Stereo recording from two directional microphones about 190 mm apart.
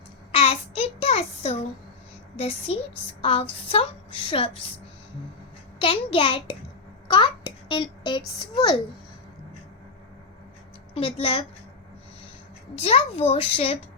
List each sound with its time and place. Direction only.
0.3 s child singing: 30° left (ahead or behind)
2.3 s a woman's voice: 30° left (ahead or behind)
5.8 s a woman's voice: 25° left (ahead or behind)
7.1 s a sound: 25° left (ahead or behind)
10.9 s a woman's voice: 30° left (ahead or behind)
12.7 s a child's voice: 30° left (ahead or behind)